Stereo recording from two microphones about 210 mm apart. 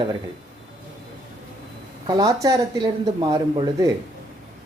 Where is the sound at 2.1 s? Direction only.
20° right (ahead or behind).